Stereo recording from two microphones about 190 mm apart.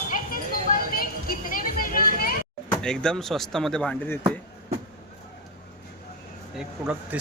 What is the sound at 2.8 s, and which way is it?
Speech, 5° left (ahead or behind).